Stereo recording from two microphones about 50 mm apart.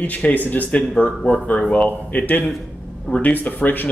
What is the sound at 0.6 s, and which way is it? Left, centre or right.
Speech, left.